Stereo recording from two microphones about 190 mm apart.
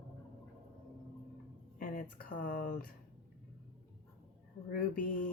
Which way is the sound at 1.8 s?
45° left (ahead or behind).